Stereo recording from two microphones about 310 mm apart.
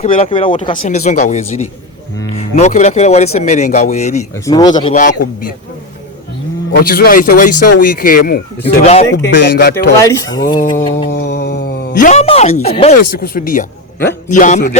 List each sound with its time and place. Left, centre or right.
0.0 s speech: centre
6.7 s speech: left
9.1 s speech: left
10.0 s speech: centre
11.1 s a sound: left
12.6 s speech: centre